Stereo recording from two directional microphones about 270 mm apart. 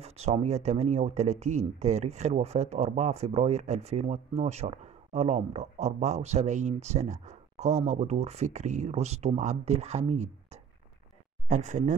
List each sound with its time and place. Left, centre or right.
0.0 s speech: right